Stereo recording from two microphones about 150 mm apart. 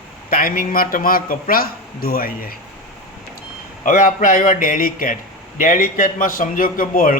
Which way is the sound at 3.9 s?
65° left (ahead or behind).